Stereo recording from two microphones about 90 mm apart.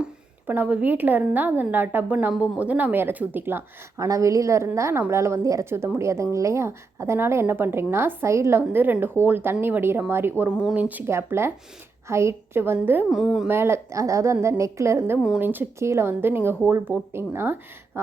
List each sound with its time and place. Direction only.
0.0 s a woman's voice: 20° right (ahead or behind)
4.0 s a woman's voice: 35° right (ahead or behind)
13.1 s a woman's voice: 5° right (ahead or behind)
13.5 s a woman's voice: 30° right (ahead or behind)